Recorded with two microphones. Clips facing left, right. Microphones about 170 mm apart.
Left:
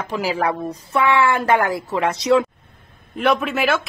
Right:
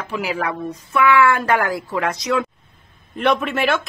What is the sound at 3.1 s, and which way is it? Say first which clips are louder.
Speech: even; centre (ahead or behind).